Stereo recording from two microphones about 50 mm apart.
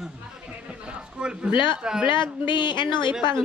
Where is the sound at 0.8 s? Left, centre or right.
Right.